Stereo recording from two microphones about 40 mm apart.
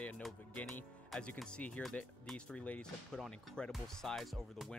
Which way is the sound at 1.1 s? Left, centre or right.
Centre.